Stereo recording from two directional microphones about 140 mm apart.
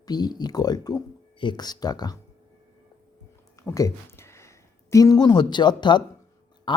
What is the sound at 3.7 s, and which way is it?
Speech, 20° left (ahead or behind).